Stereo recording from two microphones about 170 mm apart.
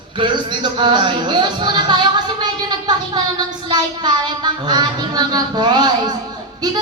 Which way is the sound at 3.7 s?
25° right (ahead or behind).